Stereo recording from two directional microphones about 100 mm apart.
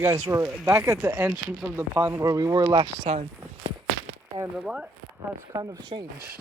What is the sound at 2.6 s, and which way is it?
Speech, 60° right (ahead or behind).